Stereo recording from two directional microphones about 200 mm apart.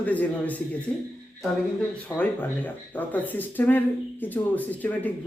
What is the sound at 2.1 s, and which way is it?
A man's voice, 15° left (ahead or behind).